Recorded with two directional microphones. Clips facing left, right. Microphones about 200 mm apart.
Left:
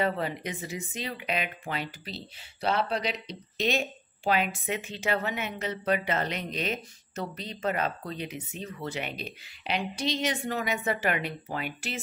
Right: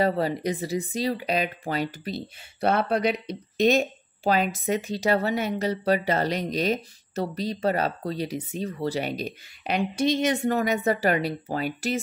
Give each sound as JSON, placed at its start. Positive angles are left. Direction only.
{"t": 0.0, "sound": "speech", "side_deg": -35}